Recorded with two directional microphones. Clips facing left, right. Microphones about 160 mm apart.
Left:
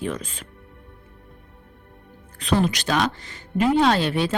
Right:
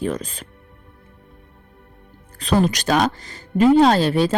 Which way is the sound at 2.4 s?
40° right (ahead or behind).